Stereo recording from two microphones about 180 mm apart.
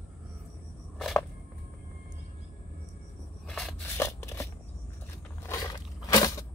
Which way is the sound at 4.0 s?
15° left (ahead or behind).